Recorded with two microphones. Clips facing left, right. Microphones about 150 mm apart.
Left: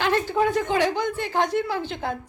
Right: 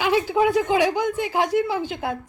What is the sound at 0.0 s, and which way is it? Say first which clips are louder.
Speech: right 2 dB; 10° right (ahead or behind).